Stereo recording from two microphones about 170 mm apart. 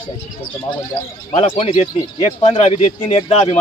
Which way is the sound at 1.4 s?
35° left (ahead or behind).